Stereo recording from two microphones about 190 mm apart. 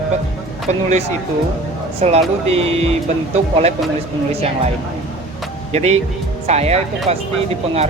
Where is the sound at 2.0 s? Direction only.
35° right (ahead or behind).